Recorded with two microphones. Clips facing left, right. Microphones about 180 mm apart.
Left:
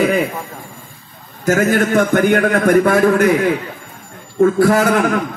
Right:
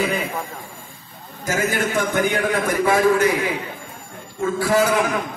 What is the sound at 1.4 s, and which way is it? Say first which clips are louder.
A man's voice: left 8 dB; 55° left (ahead or behind).